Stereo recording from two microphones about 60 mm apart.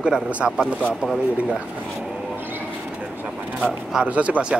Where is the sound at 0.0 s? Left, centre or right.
Centre.